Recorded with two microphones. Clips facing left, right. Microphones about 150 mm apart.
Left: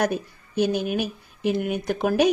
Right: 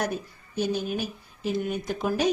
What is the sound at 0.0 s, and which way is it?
Speech, 70° left (ahead or behind).